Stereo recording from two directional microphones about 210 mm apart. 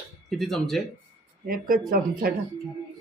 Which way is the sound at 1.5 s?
40° right (ahead or behind).